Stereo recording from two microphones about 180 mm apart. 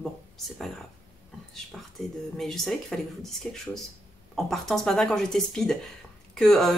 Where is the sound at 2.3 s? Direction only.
Centre (ahead or behind).